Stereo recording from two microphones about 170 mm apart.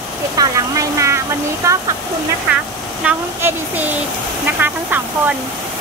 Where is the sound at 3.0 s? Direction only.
10° right (ahead or behind).